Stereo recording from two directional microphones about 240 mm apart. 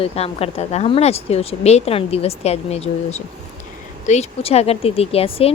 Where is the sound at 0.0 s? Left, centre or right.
Left.